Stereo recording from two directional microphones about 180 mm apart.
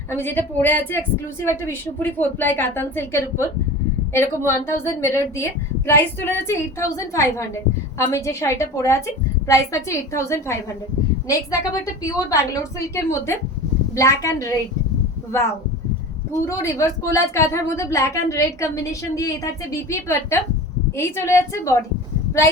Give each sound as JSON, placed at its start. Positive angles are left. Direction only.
{"t": 0.1, "sound": "a woman's voice", "side_deg": 10}
{"t": 16.5, "sound": "speech", "side_deg": 15}